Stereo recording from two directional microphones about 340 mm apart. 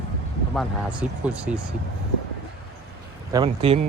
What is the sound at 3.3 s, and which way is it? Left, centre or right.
Speech, centre.